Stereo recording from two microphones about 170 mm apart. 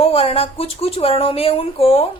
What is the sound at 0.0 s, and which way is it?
A woman's voice, 35° left (ahead or behind).